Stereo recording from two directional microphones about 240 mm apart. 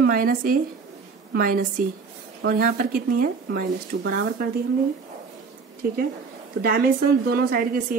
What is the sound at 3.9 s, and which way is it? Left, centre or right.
Speech, right.